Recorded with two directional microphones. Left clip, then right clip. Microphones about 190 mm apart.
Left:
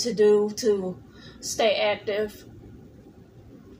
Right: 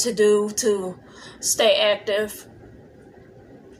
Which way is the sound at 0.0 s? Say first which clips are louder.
Right 1 dB; 5° left (ahead or behind).